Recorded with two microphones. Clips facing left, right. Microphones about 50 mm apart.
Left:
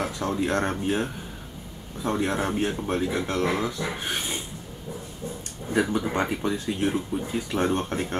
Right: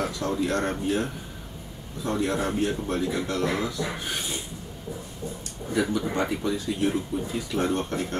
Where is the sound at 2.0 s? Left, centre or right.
Left.